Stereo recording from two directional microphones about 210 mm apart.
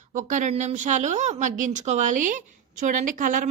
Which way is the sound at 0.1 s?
35° right (ahead or behind).